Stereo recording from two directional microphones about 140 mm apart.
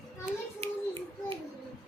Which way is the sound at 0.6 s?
35° right (ahead or behind).